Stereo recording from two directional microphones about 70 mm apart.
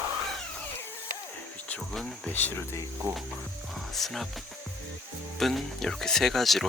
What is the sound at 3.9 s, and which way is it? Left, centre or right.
Speech, centre.